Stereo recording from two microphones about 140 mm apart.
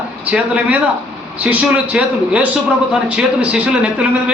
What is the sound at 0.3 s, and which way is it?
A man's voice, 10° right (ahead or behind).